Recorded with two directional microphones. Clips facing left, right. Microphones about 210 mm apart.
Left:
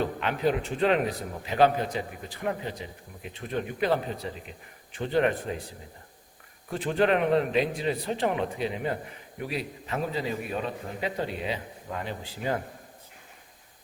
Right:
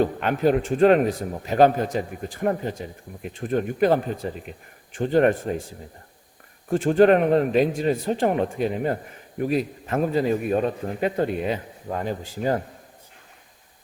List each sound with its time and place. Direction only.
0.0 s a man's voice: 50° right (ahead or behind)
6.7 s a man's voice: 45° right (ahead or behind)